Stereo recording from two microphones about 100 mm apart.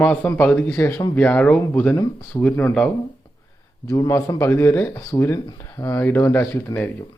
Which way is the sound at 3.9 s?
35° left (ahead or behind).